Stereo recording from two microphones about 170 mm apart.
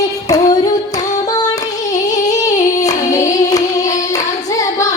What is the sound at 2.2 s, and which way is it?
Singing, 20° left (ahead or behind).